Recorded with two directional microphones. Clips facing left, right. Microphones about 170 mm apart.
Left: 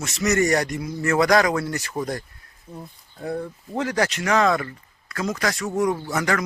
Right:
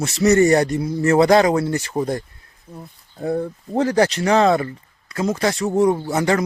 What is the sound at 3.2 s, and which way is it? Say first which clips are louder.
Speech: right 6 dB; 30° right (ahead or behind).